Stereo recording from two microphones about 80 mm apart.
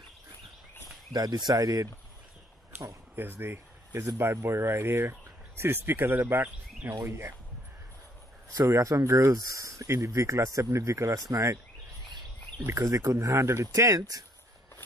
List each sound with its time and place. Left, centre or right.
1.1 s speech: right
3.2 s speech: right
6.9 s speech: right
8.6 s speech: right